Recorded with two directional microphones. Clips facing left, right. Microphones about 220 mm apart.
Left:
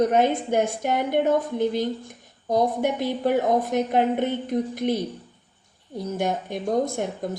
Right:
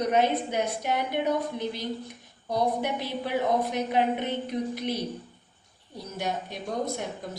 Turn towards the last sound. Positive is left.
turn(degrees=50)  # may be behind; listen again after turning